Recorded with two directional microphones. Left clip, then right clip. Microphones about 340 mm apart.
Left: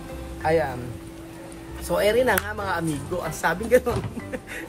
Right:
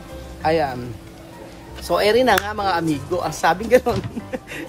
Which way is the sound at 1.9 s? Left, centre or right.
Centre.